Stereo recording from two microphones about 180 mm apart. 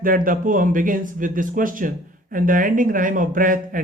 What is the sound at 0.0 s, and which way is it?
Speech, 50° right (ahead or behind).